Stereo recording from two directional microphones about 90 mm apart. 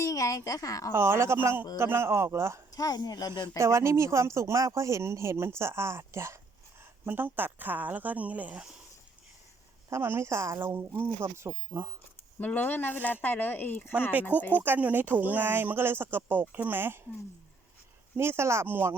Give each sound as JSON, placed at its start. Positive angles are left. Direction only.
{"t": 0.0, "sound": "a woman's voice", "side_deg": 40}
{"t": 0.9, "sound": "speech", "side_deg": -25}
{"t": 2.7, "sound": "speech", "side_deg": 45}
{"t": 3.6, "sound": "speech", "side_deg": -30}
{"t": 9.9, "sound": "speech", "side_deg": -25}
{"t": 12.4, "sound": "speech", "side_deg": 20}
{"t": 14.5, "sound": "speech", "side_deg": -20}
{"t": 18.2, "sound": "speech", "side_deg": -30}